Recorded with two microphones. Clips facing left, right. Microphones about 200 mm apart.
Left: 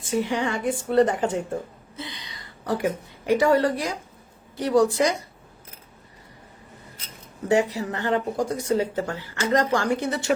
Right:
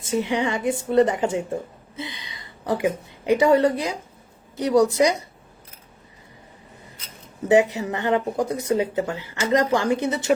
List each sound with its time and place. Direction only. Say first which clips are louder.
0.0 s a woman's voice: right 2 dB; 20° right (ahead or behind)
2.0 s a sound: right 2 dB; 50° left (ahead or behind)
2.4 s a woman's voice: right 2 dB; 20° right (ahead or behind)
7.4 s a woman's voice: right 4 dB; 20° right (ahead or behind)